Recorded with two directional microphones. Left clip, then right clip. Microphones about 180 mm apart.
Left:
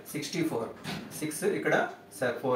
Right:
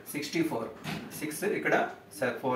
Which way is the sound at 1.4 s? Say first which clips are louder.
Even; 15° left (ahead or behind).